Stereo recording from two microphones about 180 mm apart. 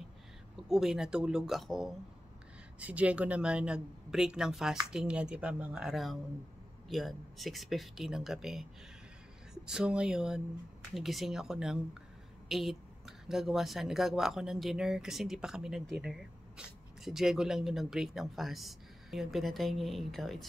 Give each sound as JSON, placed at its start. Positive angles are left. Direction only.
{"t": 0.7, "sound": "speech", "side_deg": 0}